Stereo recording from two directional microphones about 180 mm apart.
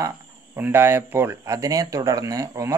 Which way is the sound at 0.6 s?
15° right (ahead or behind).